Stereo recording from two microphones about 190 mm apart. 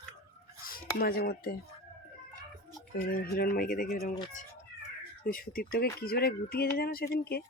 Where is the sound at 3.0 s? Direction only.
50° left (ahead or behind).